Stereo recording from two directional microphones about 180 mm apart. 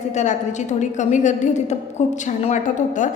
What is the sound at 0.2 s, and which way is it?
A woman's voice, 40° left (ahead or behind).